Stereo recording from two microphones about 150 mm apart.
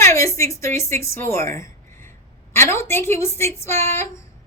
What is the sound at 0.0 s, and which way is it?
Speech, 20° left (ahead or behind).